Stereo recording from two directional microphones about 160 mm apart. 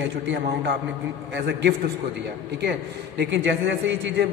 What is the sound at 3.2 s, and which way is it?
Speech, 90° right.